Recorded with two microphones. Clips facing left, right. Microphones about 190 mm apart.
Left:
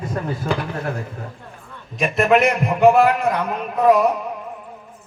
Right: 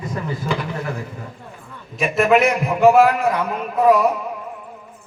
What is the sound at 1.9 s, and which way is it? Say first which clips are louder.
A man's voice: right 1 dB; 5° right (ahead or behind).